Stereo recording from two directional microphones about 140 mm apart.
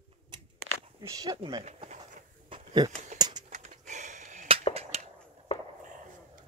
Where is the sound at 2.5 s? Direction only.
30° right (ahead or behind).